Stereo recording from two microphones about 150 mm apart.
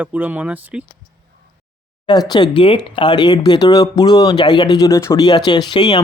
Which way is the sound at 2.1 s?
30° left (ahead or behind).